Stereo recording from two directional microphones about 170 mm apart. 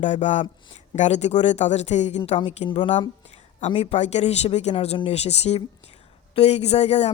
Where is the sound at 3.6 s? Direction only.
40° left (ahead or behind).